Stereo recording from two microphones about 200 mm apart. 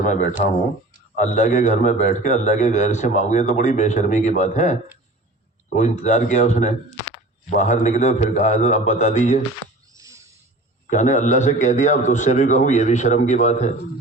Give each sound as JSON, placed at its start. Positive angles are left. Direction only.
{"t": 0.0, "sound": "a man's voice", "side_deg": 40}
{"t": 9.9, "sound": "a sound", "side_deg": -15}
{"t": 10.8, "sound": "a man's voice", "side_deg": 35}